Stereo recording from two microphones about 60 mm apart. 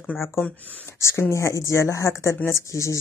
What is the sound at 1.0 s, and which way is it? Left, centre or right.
Speech, left.